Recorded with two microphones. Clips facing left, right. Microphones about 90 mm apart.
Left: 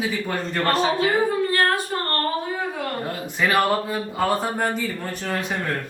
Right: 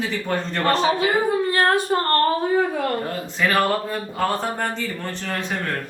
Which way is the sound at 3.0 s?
10° left (ahead or behind).